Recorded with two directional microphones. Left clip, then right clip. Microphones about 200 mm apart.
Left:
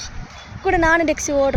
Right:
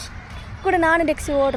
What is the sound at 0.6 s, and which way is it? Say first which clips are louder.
Speech: left 1 dB; centre (ahead or behind).